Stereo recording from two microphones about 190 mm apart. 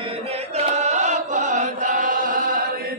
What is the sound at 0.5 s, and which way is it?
Chant, 35° right (ahead or behind).